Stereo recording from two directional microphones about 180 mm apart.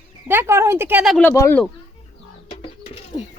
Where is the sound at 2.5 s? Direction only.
35° left (ahead or behind).